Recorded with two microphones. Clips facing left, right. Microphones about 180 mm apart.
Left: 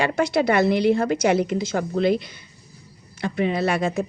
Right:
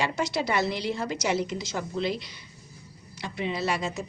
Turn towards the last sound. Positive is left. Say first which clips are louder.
# left 7 dB
turn(degrees=55)  # may be behind; listen again after turning